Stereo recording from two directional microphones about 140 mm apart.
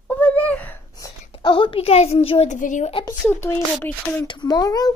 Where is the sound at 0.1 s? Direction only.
10° left (ahead or behind).